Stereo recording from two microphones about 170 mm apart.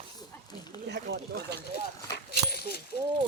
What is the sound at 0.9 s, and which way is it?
Speech, 75° right (ahead or behind).